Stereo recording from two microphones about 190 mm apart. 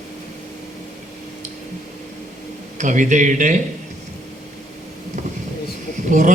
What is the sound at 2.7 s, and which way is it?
Mantra, 40° right (ahead or behind).